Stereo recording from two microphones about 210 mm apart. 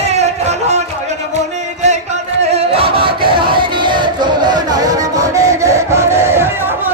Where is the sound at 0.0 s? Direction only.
30° right (ahead or behind).